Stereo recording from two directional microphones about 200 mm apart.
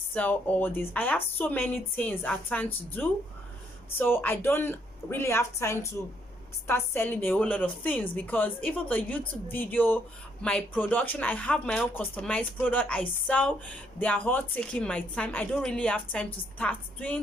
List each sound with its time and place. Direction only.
0.1 s a woman's voice: 10° left (ahead or behind)